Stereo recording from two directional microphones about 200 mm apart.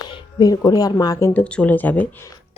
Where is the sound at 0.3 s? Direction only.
20° left (ahead or behind).